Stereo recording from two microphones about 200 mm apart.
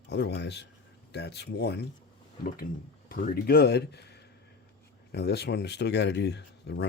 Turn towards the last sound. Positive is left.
turn(degrees=60)  # may be behind; listen again after turning